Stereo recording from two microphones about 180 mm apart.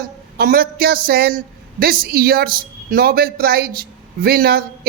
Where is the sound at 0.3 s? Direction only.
55° right (ahead or behind).